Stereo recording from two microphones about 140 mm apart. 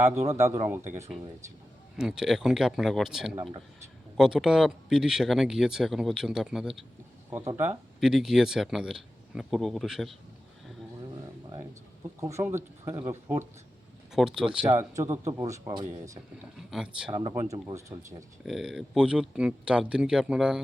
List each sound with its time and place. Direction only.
0.2 s a man's voice: 20° right (ahead or behind)
2.0 s speech: 5° right (ahead or behind)
7.3 s speech: 20° right (ahead or behind)
8.0 s speech: 5° right (ahead or behind)
12.2 s speech: 20° right (ahead or behind)
14.1 s speech: 5° right (ahead or behind)
14.9 s a man's voice: 20° right (ahead or behind)
16.6 s speech: 5° right (ahead or behind)
17.2 s speech: 40° right (ahead or behind)
17.5 s a man's voice: 25° right (ahead or behind)
18.4 s speech: centre (ahead or behind)